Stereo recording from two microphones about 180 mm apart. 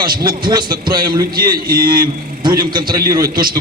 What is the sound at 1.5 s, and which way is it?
Speech, 55° right (ahead or behind).